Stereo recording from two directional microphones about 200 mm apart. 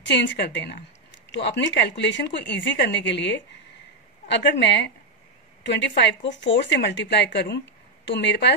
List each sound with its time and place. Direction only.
0.0 s speech: 65° left (ahead or behind)